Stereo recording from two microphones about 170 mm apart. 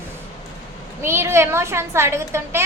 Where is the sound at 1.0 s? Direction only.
15° right (ahead or behind).